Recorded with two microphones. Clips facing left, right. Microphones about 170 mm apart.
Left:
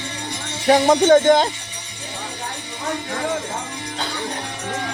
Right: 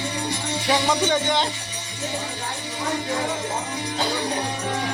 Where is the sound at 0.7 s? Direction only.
50° left (ahead or behind).